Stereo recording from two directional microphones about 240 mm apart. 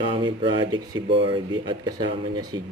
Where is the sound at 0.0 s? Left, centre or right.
Centre.